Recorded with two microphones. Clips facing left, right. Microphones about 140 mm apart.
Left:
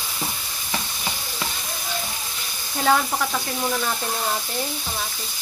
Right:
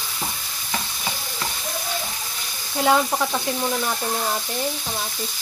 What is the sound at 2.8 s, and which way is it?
Speech, 15° right (ahead or behind).